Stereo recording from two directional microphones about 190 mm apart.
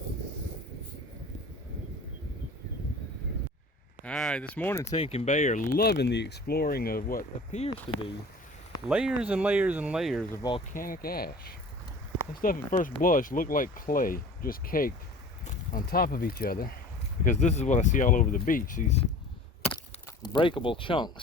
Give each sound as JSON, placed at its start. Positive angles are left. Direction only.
{"t": 4.0, "sound": "speech", "side_deg": 0}
{"t": 4.9, "sound": "speech", "side_deg": 30}
{"t": 8.9, "sound": "speech", "side_deg": -5}
{"t": 10.3, "sound": "speech", "side_deg": 20}
{"t": 10.8, "sound": "speech", "side_deg": 50}
{"t": 17.2, "sound": "speech", "side_deg": 35}
{"t": 20.2, "sound": "speech", "side_deg": 25}